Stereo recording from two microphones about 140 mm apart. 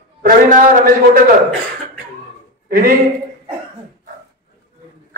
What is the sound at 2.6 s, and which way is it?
Speech, 90° right.